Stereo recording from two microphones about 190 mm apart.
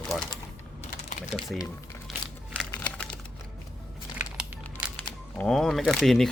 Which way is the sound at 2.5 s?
5° left (ahead or behind).